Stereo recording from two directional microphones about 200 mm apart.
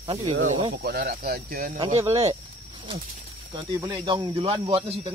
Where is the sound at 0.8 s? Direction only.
45° right (ahead or behind).